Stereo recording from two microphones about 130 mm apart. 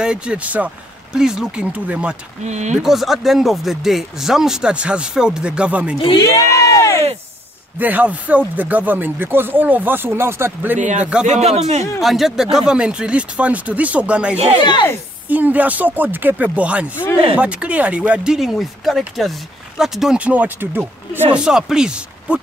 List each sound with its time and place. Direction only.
0.0 s speech: 5° right (ahead or behind)
2.4 s speech: 60° right (ahead or behind)
2.8 s speech: centre (ahead or behind)
6.2 s a sound: 25° left (ahead or behind)
7.8 s speech: 10° right (ahead or behind)
11.2 s speech: 60° right (ahead or behind)
12.0 s speech: centre (ahead or behind)
14.6 s speech: 40° left (ahead or behind)
15.2 s speech: 15° right (ahead or behind)
16.9 s speech: 15° left (ahead or behind)
17.4 s speech: 10° right (ahead or behind)
21.4 s speech: 5° right (ahead or behind)